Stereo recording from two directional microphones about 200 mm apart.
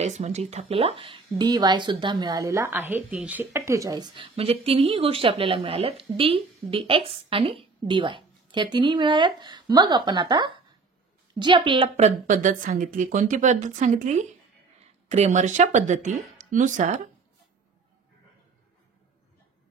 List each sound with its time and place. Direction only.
0.0 s a woman's voice: 35° right (ahead or behind)
7.8 s a sound: 25° right (ahead or behind)
8.7 s a woman's voice: 25° right (ahead or behind)